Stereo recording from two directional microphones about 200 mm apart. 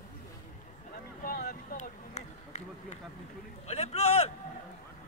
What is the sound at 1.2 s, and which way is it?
Run, 45° left (ahead or behind).